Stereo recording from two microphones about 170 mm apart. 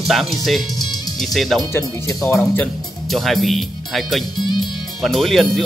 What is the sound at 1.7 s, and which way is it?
Speech, 20° left (ahead or behind).